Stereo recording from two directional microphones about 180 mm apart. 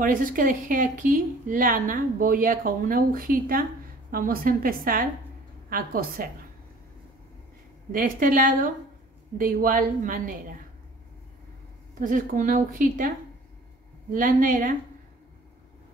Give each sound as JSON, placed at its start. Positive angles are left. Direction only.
{"t": 0.0, "sound": "a woman's voice", "side_deg": -50}
{"t": 7.9, "sound": "a woman's voice", "side_deg": -50}
{"t": 12.0, "sound": "a woman's voice", "side_deg": -45}
{"t": 14.1, "sound": "a woman's voice", "side_deg": -50}